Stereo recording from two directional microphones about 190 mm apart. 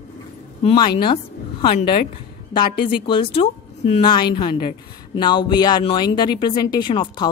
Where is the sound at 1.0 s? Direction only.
25° left (ahead or behind).